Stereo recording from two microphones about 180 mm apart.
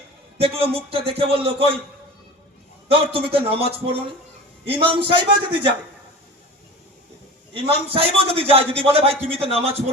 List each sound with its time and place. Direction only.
0.3 s a man's voice: 30° right (ahead or behind)
2.9 s a man's voice: 30° right (ahead or behind)
7.5 s a man's voice: 30° right (ahead or behind)